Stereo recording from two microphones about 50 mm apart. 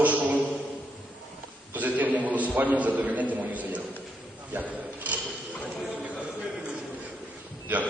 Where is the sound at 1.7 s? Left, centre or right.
Right.